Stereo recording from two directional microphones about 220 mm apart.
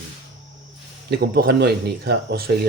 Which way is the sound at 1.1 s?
45° right (ahead or behind).